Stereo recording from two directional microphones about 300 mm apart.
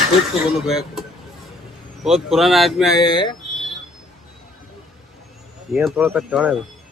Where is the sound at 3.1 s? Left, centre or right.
Centre.